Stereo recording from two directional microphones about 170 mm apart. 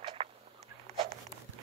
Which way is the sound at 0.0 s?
30° right (ahead or behind).